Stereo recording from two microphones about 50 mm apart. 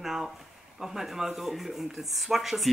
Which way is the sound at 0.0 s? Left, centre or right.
Centre.